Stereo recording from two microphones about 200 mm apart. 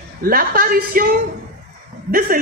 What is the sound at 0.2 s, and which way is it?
Speech, 45° right (ahead or behind).